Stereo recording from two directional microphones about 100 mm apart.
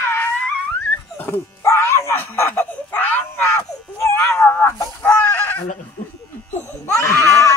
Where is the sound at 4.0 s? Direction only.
30° left (ahead or behind).